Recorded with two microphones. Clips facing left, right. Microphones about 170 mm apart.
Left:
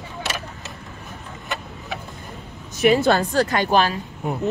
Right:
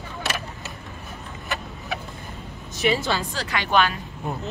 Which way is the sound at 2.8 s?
50° left (ahead or behind).